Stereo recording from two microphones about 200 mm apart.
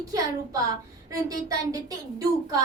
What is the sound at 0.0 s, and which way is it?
A woman's voice, 15° right (ahead or behind).